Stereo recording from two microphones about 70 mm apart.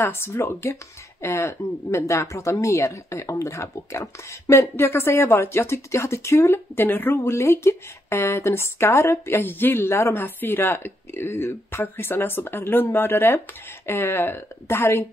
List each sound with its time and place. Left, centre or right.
0.0 s speech: left
7.2 s speech: left
10.1 s speech: left